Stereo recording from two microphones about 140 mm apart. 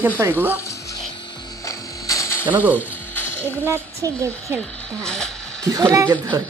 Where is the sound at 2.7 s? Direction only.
15° left (ahead or behind).